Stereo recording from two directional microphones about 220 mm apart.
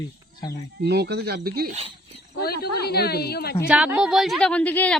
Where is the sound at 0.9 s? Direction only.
50° right (ahead or behind).